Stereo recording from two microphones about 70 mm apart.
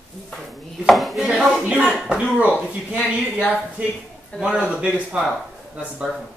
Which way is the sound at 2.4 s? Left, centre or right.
Left.